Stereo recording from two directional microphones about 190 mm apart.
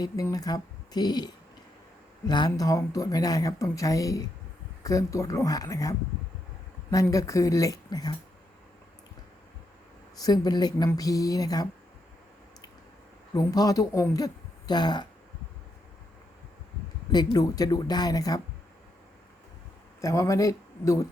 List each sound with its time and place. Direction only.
0.0 s speech: 20° left (ahead or behind)
10.2 s speech: 20° left (ahead or behind)
13.3 s speech: 20° left (ahead or behind)
17.3 s speech: 20° left (ahead or behind)
20.0 s speech: 15° left (ahead or behind)